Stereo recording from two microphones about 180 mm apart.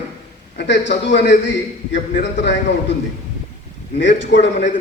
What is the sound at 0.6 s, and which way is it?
A man's voice, 75° left (ahead or behind).